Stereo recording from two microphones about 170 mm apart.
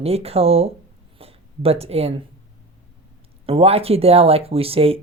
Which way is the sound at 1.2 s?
35° right (ahead or behind).